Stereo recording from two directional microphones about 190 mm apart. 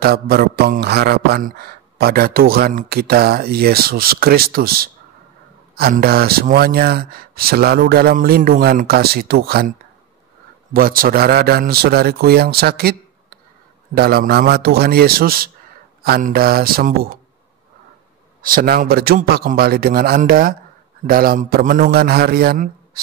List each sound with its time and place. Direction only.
0.0 s mantra: 55° right (ahead or behind)
13.9 s a man's voice: 55° right (ahead or behind)
16.0 s mantra: 50° right (ahead or behind)
18.4 s mantra: 50° right (ahead or behind)